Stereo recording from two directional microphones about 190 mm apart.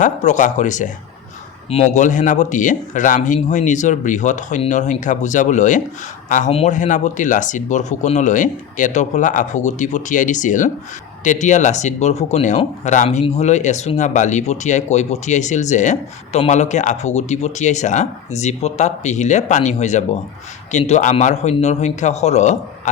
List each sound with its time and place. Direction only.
0.0 s speech: 40° left (ahead or behind)